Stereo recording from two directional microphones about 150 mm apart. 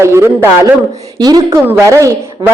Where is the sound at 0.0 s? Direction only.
20° right (ahead or behind).